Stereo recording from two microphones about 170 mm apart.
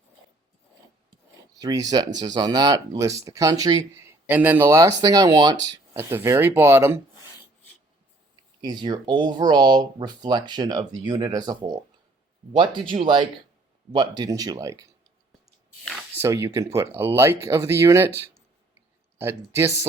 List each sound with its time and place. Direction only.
1.5 s speech: 20° right (ahead or behind)
8.6 s speech: 25° right (ahead or behind)
15.8 s speech: centre (ahead or behind)
16.1 s speech: 15° right (ahead or behind)
19.2 s speech: 15° right (ahead or behind)